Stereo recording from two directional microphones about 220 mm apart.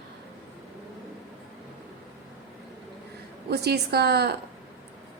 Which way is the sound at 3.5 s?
45° right (ahead or behind).